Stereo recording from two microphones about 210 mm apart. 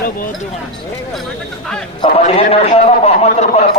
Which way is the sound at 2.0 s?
25° left (ahead or behind).